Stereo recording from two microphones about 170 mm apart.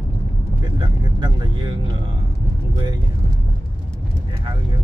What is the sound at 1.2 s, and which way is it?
Speech, 25° right (ahead or behind).